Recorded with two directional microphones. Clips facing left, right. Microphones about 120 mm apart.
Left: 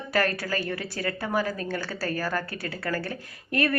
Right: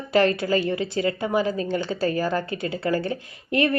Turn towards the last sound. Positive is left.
turn(degrees=-20)  # may be behind; listen again after turning